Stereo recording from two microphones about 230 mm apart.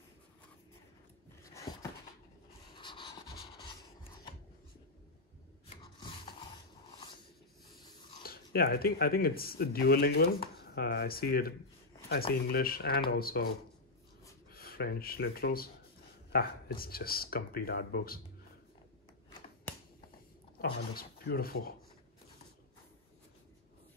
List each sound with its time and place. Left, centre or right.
1.4 s a sound: centre
2.7 s pant: left
3.5 s rub: left
8.2 s speech: left
14.5 s speech: left
19.7 s finger snapping: centre
20.6 s speech: left